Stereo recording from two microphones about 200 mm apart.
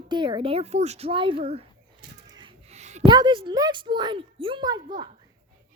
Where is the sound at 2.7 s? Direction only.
35° right (ahead or behind).